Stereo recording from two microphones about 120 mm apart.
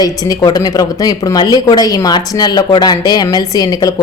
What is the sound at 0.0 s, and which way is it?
Speech, 30° left (ahead or behind).